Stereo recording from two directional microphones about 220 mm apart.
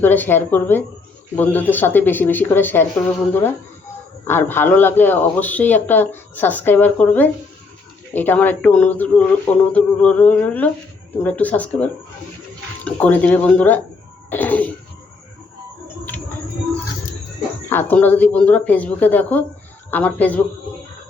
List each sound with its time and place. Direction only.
0.0 s speech: 10° left (ahead or behind)
17.7 s speech: 10° left (ahead or behind)